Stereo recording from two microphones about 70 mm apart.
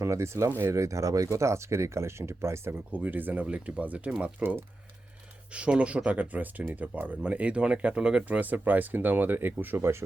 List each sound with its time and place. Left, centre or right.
0.0 s speech: right
2.9 s speech: right
5.5 s speech: centre; by 10.0 s right